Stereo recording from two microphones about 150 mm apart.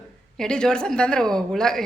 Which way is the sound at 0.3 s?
5° left (ahead or behind).